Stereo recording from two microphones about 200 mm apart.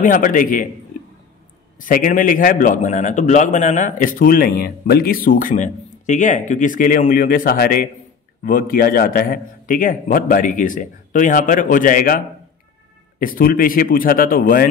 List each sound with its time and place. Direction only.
0.0 s a man's voice: 40° left (ahead or behind)
1.8 s a man's voice: 40° left (ahead or behind)
13.2 s a man's voice: 45° left (ahead or behind)